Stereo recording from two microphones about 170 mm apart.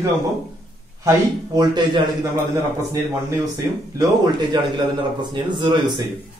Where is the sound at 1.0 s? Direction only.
25° right (ahead or behind).